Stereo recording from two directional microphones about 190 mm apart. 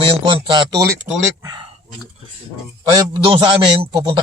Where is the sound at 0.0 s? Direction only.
25° right (ahead or behind).